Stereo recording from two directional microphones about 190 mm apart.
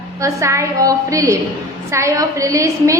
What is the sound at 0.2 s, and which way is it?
A woman's voice, 15° right (ahead or behind).